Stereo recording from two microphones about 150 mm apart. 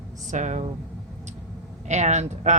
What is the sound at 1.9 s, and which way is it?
Speech, 50° right (ahead or behind).